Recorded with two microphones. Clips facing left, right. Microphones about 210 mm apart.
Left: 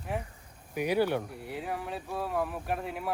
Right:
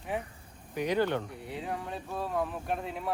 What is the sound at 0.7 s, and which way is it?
Speech, 10° left (ahead or behind).